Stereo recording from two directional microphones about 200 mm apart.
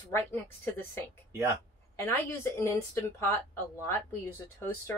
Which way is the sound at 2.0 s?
15° left (ahead or behind).